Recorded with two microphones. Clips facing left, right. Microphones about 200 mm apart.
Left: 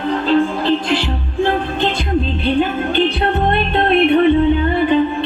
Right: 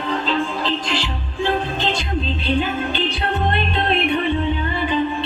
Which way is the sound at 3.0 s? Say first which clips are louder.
Left 5 dB; 55° left (ahead or behind).